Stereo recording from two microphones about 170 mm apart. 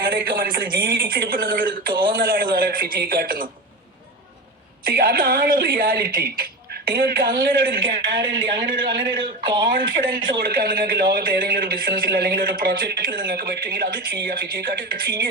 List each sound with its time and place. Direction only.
0.0 s speech: 60° right (ahead or behind)
4.9 s speech: 65° right (ahead or behind)
7.9 s speech: 30° right (ahead or behind)
8.6 s speech: 65° right (ahead or behind)
9.2 s speech: 25° right (ahead or behind)
10.1 s speech: 60° right (ahead or behind)